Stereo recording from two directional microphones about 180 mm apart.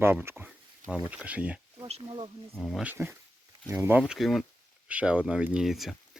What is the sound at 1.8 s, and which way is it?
Speech, 35° right (ahead or behind).